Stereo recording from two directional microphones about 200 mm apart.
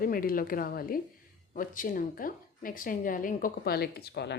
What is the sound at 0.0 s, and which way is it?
A woman's voice, 45° left (ahead or behind).